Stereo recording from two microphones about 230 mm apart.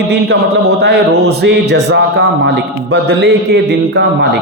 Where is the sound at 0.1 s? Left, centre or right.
Right.